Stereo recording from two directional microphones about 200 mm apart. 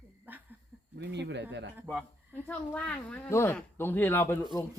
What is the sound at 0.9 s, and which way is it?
Speech, 60° right (ahead or behind).